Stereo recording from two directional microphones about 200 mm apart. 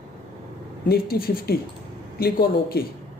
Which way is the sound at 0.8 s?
50° left (ahead or behind).